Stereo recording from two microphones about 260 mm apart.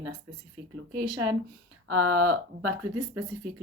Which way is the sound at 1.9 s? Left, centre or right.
Right.